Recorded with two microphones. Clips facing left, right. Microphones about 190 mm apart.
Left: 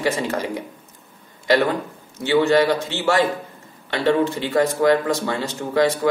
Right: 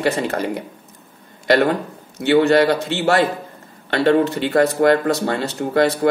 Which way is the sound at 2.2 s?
60° right (ahead or behind).